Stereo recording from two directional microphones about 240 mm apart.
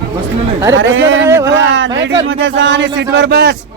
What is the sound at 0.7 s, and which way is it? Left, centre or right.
Speech, right.